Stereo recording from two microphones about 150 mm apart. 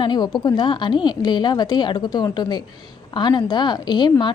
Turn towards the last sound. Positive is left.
turn(degrees=30)  # may be behind; listen again after turning